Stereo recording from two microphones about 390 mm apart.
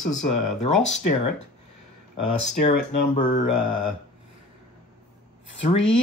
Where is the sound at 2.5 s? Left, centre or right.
Centre.